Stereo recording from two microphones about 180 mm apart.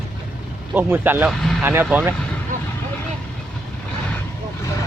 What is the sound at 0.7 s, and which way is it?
Speech, 10° right (ahead or behind).